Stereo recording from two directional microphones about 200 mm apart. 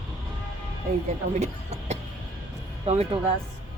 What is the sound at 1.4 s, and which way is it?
Speech, 35° right (ahead or behind).